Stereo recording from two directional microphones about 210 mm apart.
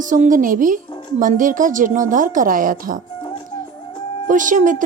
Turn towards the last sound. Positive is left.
turn(degrees=-35)  # may be behind; listen again after turning